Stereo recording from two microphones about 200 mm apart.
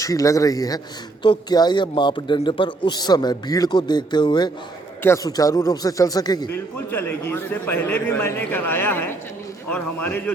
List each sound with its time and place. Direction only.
0.0 s a man's voice: 15° left (ahead or behind)